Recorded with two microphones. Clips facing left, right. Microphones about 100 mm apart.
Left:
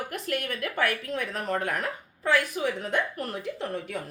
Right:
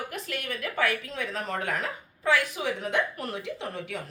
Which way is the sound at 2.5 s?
45° left (ahead or behind).